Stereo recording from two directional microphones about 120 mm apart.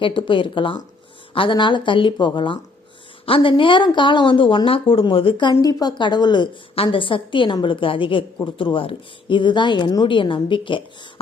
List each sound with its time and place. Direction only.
0.0 s a woman's voice: 45° left (ahead or behind)